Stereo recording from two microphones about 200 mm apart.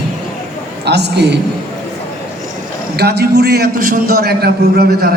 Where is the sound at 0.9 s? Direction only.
55° right (ahead or behind).